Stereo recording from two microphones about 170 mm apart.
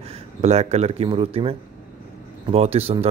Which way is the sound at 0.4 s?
40° right (ahead or behind).